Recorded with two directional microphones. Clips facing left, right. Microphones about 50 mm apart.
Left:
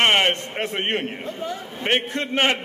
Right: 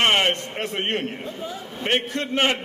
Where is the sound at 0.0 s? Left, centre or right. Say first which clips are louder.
Left 1 dB; centre.